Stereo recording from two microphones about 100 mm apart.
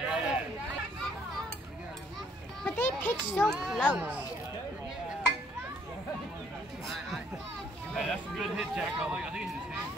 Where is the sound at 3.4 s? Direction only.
5° right (ahead or behind).